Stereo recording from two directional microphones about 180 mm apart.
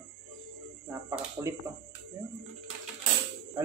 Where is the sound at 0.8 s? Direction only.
15° right (ahead or behind).